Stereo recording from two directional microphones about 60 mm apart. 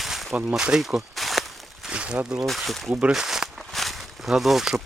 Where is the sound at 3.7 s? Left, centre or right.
Centre.